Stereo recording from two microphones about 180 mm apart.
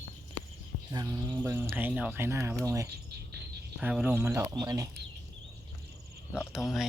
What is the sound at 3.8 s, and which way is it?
Speech, 5° right (ahead or behind).